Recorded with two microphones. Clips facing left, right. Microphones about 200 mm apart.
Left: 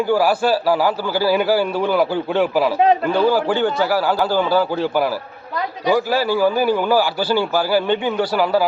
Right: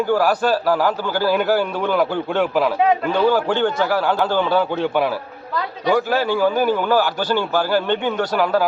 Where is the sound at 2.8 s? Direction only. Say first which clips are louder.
Left 4 dB; 35° left (ahead or behind).